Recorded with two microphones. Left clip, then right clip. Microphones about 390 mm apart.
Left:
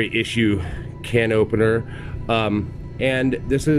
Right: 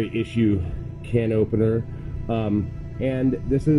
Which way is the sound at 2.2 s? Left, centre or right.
Left.